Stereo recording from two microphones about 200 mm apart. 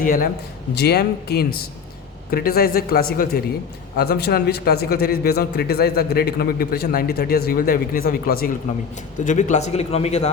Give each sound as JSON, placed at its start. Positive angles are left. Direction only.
{"t": 0.0, "sound": "a man's voice", "side_deg": 45}